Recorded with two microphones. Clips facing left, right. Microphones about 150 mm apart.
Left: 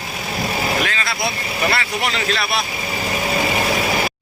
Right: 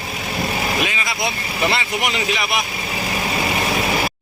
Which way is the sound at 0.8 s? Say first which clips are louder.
Even; 15° right (ahead or behind).